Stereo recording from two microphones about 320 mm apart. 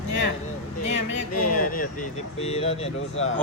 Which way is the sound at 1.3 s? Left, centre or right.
Left.